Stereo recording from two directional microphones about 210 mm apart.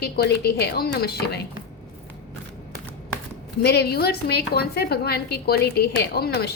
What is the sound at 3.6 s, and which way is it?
A woman's voice, 50° left (ahead or behind).